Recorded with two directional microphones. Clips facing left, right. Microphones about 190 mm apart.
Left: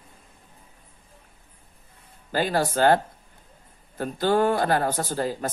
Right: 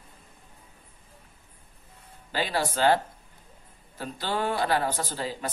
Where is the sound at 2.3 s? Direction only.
45° left (ahead or behind).